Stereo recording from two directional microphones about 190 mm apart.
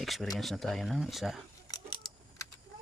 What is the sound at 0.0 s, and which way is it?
Speech, centre (ahead or behind).